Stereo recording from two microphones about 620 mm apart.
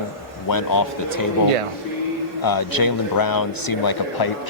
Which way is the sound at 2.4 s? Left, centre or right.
Left.